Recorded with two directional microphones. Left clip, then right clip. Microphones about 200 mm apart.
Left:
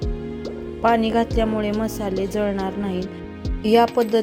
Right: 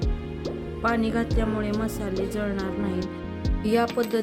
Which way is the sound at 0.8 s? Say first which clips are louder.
Left 7 dB; 15° left (ahead or behind).